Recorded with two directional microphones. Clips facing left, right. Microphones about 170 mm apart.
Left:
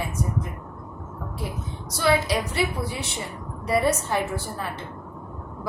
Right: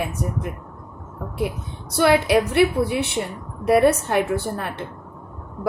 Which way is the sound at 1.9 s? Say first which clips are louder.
Right 6 dB; 60° right (ahead or behind).